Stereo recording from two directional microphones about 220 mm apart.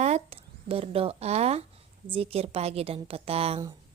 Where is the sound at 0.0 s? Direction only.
30° right (ahead or behind).